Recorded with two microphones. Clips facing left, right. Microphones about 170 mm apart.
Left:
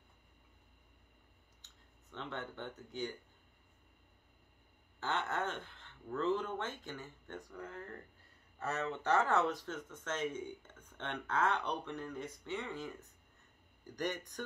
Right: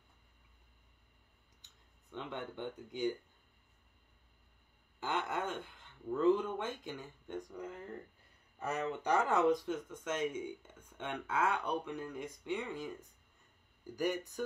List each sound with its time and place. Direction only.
1.6 s speech: 15° right (ahead or behind)
5.0 s speech: 10° right (ahead or behind)